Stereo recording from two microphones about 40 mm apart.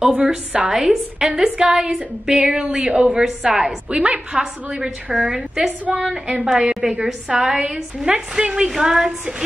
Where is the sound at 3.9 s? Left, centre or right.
Right.